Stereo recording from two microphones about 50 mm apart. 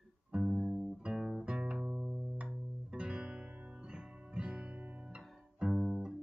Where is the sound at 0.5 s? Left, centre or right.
Centre.